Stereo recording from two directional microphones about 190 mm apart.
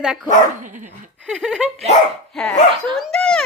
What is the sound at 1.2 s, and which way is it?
A child's voice, 5° right (ahead or behind).